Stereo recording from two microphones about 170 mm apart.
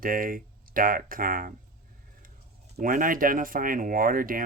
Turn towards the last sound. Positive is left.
turn(degrees=-55)  # may be behind; listen again after turning